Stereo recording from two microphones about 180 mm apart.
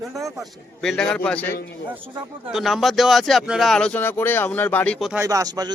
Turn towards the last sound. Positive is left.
turn(degrees=-20)  # may be behind; listen again after turning